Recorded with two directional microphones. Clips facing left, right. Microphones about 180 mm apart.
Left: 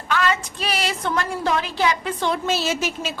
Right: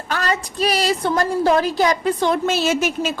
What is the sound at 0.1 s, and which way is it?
A woman's voice, 40° right (ahead or behind).